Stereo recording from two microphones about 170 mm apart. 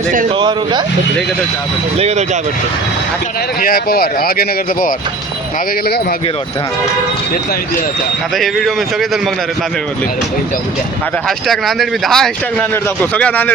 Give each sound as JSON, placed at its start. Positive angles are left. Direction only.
{"t": 0.3, "sound": "speech", "side_deg": -25}
{"t": 2.0, "sound": "speech", "side_deg": -40}
{"t": 3.6, "sound": "speech", "side_deg": 60}
{"t": 8.4, "sound": "speech", "side_deg": 0}
{"t": 11.3, "sound": "a man's voice", "side_deg": 0}